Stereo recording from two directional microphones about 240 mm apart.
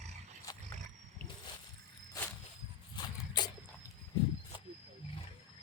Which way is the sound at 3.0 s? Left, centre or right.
Centre.